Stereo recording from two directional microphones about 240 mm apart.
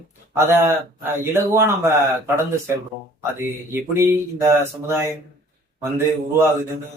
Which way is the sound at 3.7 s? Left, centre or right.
Centre.